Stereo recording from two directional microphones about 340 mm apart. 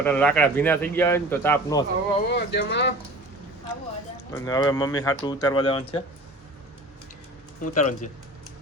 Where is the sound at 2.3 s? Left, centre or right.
Left.